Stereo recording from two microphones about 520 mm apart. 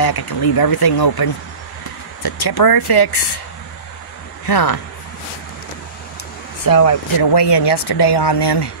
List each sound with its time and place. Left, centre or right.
0.0 s speech: left
4.5 s speech: left
6.6 s speech: left